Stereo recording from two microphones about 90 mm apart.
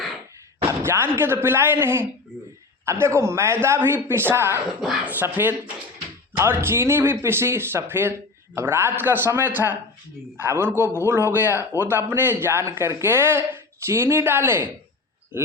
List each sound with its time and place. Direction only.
0.7 s speech: 25° right (ahead or behind)
4.8 s speech: 5° right (ahead or behind)
5.0 s speech: 20° right (ahead or behind)